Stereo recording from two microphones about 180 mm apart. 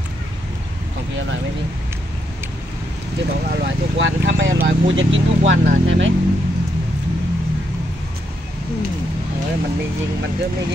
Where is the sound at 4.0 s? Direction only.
90° right.